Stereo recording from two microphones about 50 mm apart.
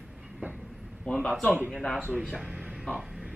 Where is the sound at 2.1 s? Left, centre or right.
Centre.